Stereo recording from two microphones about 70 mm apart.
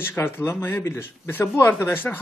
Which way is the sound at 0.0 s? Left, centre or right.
Left.